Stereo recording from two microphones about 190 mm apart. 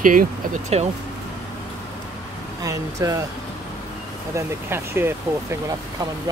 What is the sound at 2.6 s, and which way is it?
Speech, 15° right (ahead or behind).